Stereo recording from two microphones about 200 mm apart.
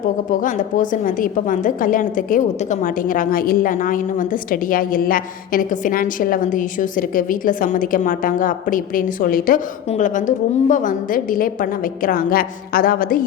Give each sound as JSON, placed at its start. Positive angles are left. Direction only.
{"t": 0.3, "sound": "a woman's voice", "side_deg": 40}